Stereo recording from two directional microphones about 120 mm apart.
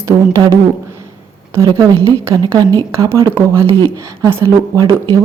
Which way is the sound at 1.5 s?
25° right (ahead or behind).